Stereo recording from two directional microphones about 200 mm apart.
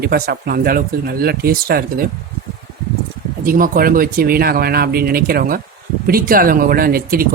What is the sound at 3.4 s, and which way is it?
Speech, 45° right (ahead or behind).